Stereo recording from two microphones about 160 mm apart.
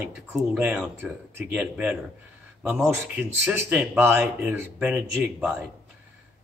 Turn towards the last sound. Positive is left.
turn(degrees=-10)  # may be behind; listen again after turning